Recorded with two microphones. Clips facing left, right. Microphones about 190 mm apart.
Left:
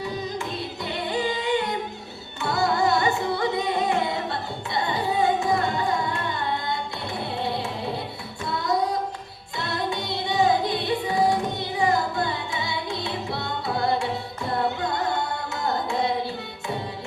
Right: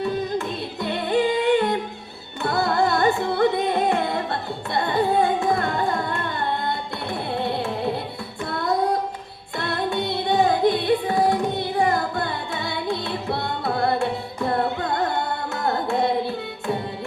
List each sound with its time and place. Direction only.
1.1 s singing: 55° right (ahead or behind)
2.4 s carnatic music: 55° right (ahead or behind)
8.5 s child singing: 55° right (ahead or behind)
9.6 s music: 55° right (ahead or behind)
15.6 s carnatic music: 55° right (ahead or behind)